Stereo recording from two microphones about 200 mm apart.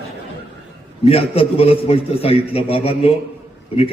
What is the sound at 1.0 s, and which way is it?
A man's voice, 30° left (ahead or behind).